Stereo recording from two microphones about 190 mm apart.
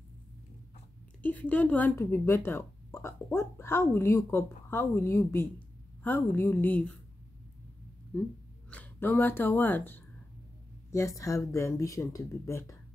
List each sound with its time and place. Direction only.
1.2 s speech: 10° left (ahead or behind)
8.6 s speech: 10° left (ahead or behind)